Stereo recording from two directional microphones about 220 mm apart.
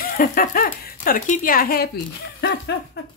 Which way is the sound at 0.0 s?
40° left (ahead or behind).